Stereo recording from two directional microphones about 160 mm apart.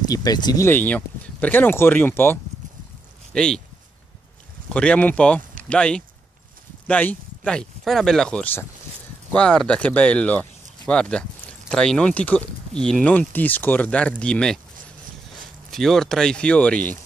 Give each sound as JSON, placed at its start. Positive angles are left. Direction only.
{"t": 0.1, "sound": "speech", "side_deg": 25}
{"t": 0.7, "sound": "speech", "side_deg": 10}
{"t": 3.3, "sound": "speech", "side_deg": 5}
{"t": 4.7, "sound": "speech", "side_deg": 10}
{"t": 15.7, "sound": "speech", "side_deg": 0}